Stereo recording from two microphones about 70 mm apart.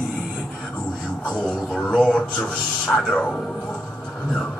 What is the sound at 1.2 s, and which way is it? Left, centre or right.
A man's voice, centre.